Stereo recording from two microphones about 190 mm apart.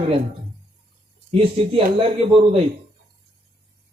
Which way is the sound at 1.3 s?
25° right (ahead or behind).